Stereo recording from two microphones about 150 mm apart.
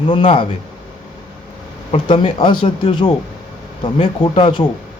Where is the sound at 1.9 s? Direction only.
35° left (ahead or behind).